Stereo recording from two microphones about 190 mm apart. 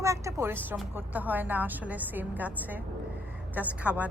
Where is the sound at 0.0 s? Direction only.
15° right (ahead or behind).